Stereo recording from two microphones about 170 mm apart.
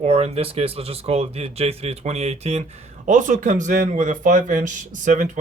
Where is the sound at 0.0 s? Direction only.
35° right (ahead or behind).